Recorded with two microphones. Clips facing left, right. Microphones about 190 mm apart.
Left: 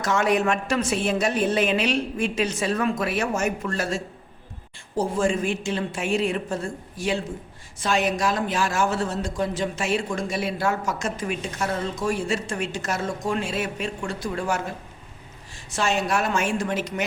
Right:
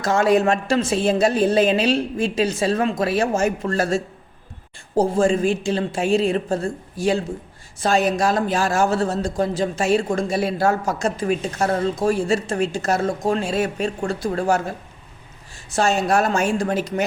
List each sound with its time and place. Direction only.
0.0 s a woman's voice: 30° right (ahead or behind)
15.7 s a woman's voice: 40° right (ahead or behind)